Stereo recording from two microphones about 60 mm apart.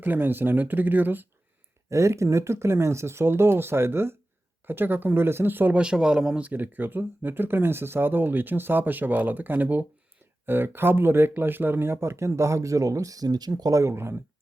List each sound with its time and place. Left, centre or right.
0.0 s speech: right
1.9 s speech: right
5.7 s speech: centre
6.5 s speech: right
13.9 s speech: right